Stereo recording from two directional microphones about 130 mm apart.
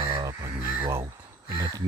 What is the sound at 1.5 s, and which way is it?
Speech, 30° right (ahead or behind).